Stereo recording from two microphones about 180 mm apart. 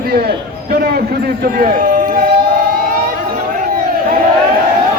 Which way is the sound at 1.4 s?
50° right (ahead or behind).